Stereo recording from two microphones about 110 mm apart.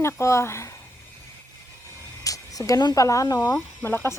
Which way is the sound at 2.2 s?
30° left (ahead or behind).